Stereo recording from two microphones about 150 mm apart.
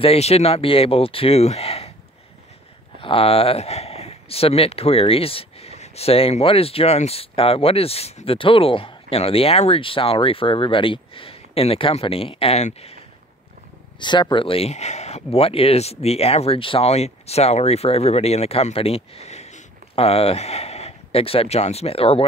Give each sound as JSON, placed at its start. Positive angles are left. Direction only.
{"t": 0.0, "sound": "speech", "side_deg": 40}
{"t": 3.0, "sound": "speech", "side_deg": 35}
{"t": 13.9, "sound": "speech", "side_deg": 30}